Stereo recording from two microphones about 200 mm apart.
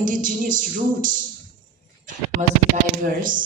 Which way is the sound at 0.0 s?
40° right (ahead or behind).